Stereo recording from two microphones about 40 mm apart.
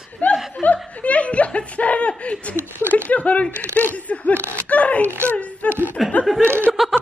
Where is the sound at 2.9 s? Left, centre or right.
Left.